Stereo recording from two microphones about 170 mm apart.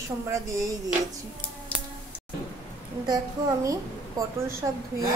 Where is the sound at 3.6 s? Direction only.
20° right (ahead or behind).